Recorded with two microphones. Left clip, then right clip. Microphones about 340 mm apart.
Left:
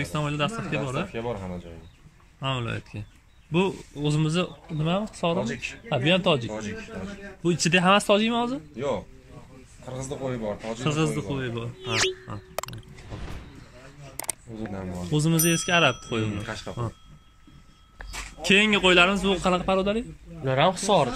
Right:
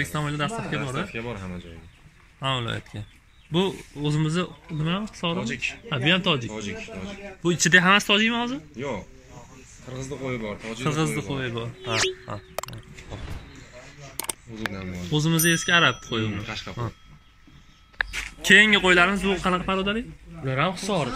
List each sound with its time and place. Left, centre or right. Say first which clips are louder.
0.0 s speech: even; centre
1.1 s speech: left 2 dB; left
2.4 s a man's voice: right 3 dB; centre
5.4 s speech: right 2 dB; left
5.9 s a man's voice: left 1 dB; centre
6.5 s speech: even; left
7.4 s a man's voice: right 3 dB; centre
9.9 s speech: even; left
10.8 s speech: right 2 dB; centre
15.0 s speech: right 2 dB; centre
18.4 s a man's voice: right 4 dB; centre
20.4 s speech: left 4 dB; left